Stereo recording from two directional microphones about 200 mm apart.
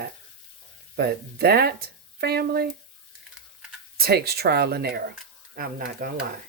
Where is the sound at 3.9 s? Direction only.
50° right (ahead or behind).